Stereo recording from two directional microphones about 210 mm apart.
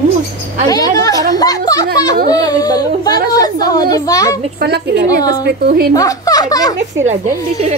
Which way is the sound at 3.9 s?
15° left (ahead or behind).